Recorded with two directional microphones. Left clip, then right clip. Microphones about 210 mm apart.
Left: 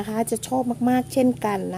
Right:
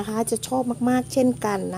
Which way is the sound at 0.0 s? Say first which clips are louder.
Even; 5° left (ahead or behind).